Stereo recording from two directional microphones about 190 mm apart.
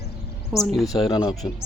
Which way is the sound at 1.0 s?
20° left (ahead or behind).